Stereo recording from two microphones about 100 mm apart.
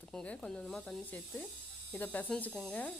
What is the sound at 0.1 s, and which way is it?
Speech, 10° left (ahead or behind).